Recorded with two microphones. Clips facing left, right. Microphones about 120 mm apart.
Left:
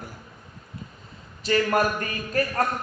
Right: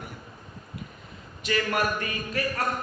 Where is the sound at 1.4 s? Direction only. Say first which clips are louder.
Left 5 dB; 35° left (ahead or behind).